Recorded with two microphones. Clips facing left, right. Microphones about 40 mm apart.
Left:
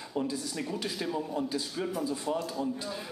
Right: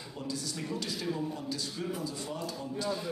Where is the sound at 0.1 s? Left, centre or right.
Left.